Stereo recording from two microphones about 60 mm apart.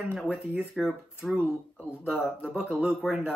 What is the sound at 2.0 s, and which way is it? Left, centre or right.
Speech, right.